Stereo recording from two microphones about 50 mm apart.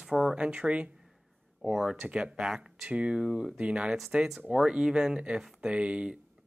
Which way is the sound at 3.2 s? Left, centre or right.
Centre.